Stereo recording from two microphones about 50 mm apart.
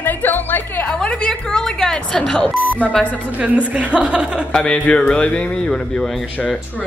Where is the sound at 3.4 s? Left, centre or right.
Right.